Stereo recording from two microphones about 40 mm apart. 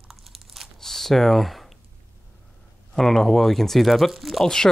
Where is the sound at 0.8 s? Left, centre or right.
Centre.